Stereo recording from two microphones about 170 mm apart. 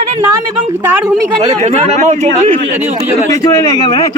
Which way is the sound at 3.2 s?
20° left (ahead or behind).